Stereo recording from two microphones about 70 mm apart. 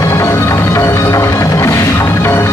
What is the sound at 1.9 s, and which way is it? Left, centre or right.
Music, left.